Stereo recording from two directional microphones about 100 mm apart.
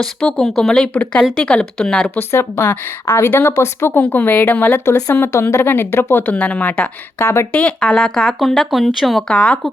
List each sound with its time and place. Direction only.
0.0 s speech: 5° left (ahead or behind)
2.1 s a woman's voice: 25° left (ahead or behind)
7.2 s a woman's voice: 25° left (ahead or behind)
7.5 s speech: 10° left (ahead or behind)